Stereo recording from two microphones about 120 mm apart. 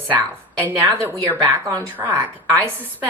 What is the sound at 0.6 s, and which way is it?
A woman's voice, 15° right (ahead or behind).